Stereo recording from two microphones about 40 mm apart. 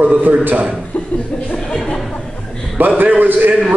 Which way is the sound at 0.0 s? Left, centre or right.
Right.